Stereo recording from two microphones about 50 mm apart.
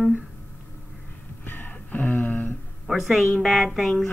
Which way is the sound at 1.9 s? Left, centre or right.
Left.